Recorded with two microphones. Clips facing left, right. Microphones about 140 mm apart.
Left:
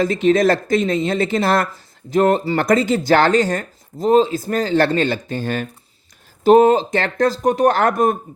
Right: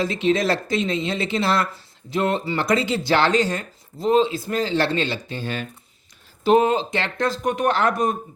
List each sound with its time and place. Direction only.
0.0 s speech: 45° left (ahead or behind)